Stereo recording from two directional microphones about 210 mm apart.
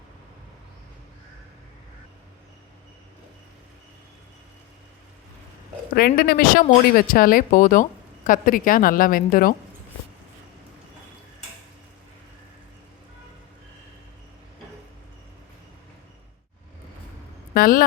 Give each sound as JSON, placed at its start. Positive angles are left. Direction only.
{"t": 5.9, "sound": "a woman's voice", "side_deg": 45}
{"t": 17.5, "sound": "speech", "side_deg": 45}